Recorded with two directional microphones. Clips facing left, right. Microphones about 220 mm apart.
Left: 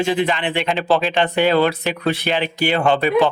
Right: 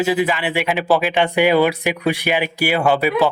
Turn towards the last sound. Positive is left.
turn(degrees=-5)  # may be behind; listen again after turning